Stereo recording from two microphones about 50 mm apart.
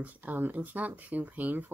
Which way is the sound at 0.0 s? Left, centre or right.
Right.